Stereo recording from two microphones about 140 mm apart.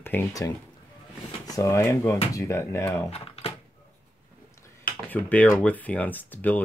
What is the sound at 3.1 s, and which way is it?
Speech, 45° left (ahead or behind).